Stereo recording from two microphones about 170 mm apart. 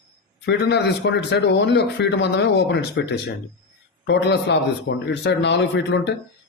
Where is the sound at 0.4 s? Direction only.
80° left.